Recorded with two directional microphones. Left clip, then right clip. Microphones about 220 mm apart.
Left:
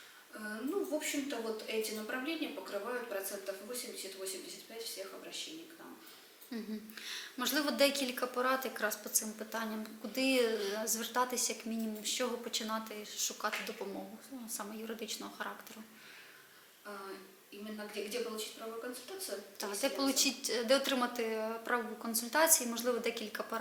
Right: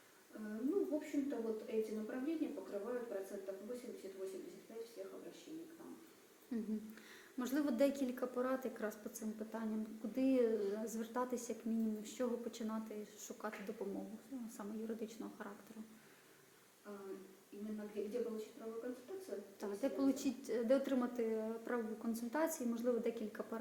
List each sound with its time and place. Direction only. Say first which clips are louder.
0.3 s a sound: left 2 dB; 15° right (ahead or behind)
1.0 s a woman's voice: left 4 dB; 5° right (ahead or behind)
3.7 s a woman's voice: left 5 dB; 5° right (ahead or behind)
6.5 s a woman's voice: left 1 dB; 5° right (ahead or behind)
10.2 s a woman's voice: left 4 dB; 5° right (ahead or behind)
16.8 s a sound: left 5 dB; 15° right (ahead or behind)
17.7 s a woman's voice: left 4 dB; 10° right (ahead or behind)
18.7 s speech: left 3 dB; 15° right (ahead or behind)
19.8 s a woman's voice: left 6 dB; 5° right (ahead or behind)
22.1 s a woman's voice: left 10 dB; 5° right (ahead or behind)